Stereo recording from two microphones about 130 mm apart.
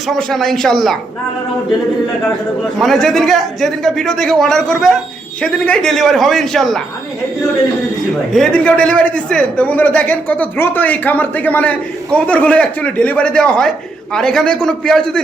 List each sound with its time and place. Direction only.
0.1 s a man's voice: 5° left (ahead or behind)
2.8 s a man's voice: centre (ahead or behind)
8.3 s a man's voice: 5° left (ahead or behind)